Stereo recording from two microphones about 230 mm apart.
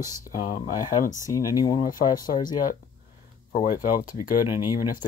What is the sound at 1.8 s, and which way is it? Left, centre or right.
Speech, left.